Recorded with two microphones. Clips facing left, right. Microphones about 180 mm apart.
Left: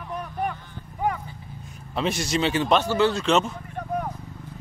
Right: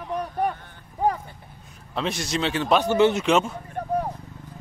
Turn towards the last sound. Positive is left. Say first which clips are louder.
# right 3 dB
turn(degrees=-30)  # may be behind; listen again after turning